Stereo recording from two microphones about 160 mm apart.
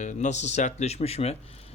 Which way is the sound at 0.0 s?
50° left (ahead or behind).